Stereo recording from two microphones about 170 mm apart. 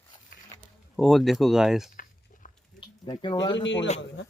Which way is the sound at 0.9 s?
Centre (ahead or behind).